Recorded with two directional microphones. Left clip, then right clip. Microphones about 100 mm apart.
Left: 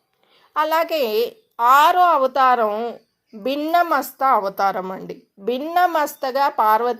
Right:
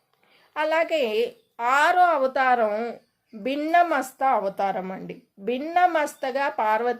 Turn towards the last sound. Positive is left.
turn(degrees=20)  # may be behind; listen again after turning